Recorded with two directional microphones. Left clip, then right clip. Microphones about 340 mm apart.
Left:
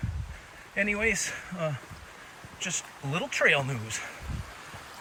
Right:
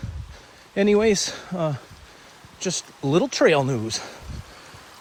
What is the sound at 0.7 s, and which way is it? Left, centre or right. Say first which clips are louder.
Speech: right 8 dB; right.